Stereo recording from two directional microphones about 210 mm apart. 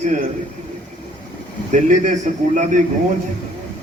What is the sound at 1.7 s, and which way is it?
A man's voice, 35° right (ahead or behind).